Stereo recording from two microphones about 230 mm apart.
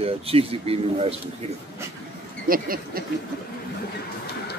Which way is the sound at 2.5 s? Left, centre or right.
Right.